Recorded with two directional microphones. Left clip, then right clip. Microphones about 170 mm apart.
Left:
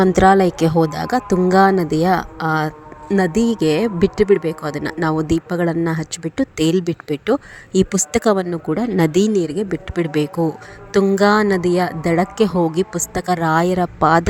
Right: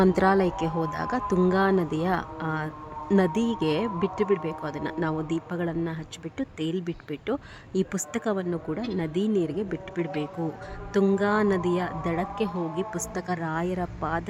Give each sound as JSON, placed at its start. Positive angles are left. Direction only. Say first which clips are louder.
{"t": 0.0, "sound": "speech", "louder": "left 9 dB", "side_deg": 30}
{"t": 9.0, "sound": "speech", "louder": "left 11 dB", "side_deg": 45}
{"t": 12.9, "sound": "speech", "louder": "left 11 dB", "side_deg": 30}